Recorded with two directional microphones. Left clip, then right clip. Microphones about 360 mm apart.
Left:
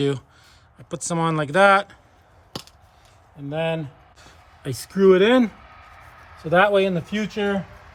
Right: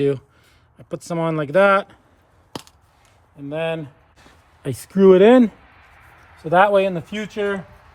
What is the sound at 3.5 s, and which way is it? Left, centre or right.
Speech, centre.